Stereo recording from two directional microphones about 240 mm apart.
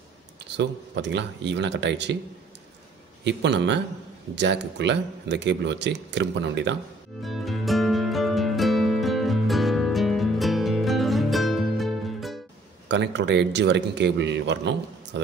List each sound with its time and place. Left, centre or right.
0.6 s speech: right
3.3 s speech: right
7.2 s music: centre
12.8 s speech: right